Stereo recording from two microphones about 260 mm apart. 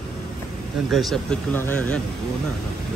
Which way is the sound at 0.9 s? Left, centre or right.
Centre.